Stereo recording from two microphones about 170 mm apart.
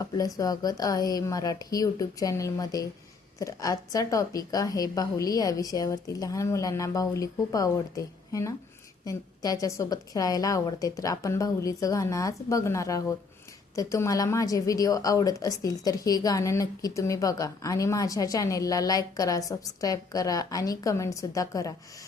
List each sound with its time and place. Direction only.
0.0 s a woman's voice: 20° left (ahead or behind)